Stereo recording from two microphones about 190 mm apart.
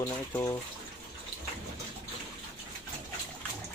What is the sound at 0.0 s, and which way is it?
Speech, 20° left (ahead or behind).